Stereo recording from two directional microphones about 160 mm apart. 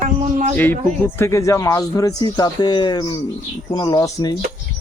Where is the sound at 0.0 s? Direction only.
50° right (ahead or behind).